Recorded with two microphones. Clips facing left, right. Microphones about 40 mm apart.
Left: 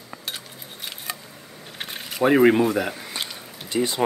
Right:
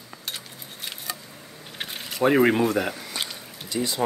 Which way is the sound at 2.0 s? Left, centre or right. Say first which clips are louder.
Left 3 dB; centre.